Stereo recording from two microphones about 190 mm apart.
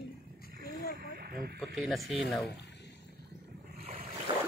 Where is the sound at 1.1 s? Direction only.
55° right (ahead or behind).